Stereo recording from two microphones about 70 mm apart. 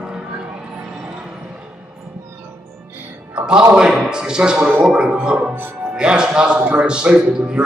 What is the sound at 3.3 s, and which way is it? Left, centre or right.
Music, centre.